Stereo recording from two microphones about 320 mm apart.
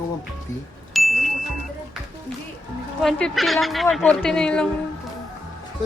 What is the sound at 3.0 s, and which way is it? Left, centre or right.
Speech, centre.